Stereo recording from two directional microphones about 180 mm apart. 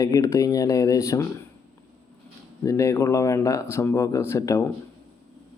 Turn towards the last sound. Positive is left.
turn(degrees=15)  # may be behind; listen again after turning